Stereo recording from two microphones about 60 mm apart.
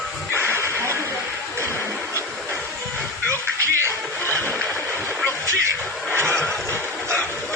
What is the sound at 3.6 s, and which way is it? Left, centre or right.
Music, right.